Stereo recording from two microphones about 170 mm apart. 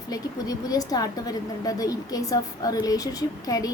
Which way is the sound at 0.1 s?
20° left (ahead or behind).